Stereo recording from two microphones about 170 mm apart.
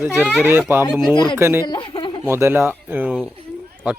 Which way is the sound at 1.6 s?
30° left (ahead or behind).